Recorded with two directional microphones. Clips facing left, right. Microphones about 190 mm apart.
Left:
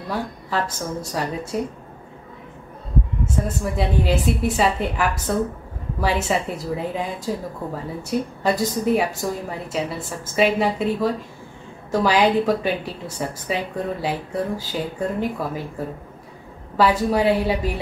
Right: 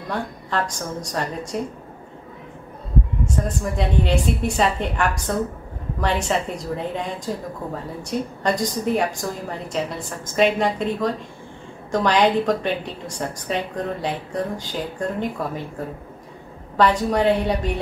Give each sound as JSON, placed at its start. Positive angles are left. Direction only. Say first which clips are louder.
{"t": 0.1, "sound": "speech", "louder": "even", "side_deg": 5}
{"t": 3.4, "sound": "speech", "louder": "even", "side_deg": 5}
{"t": 16.7, "sound": "speech", "louder": "even", "side_deg": 5}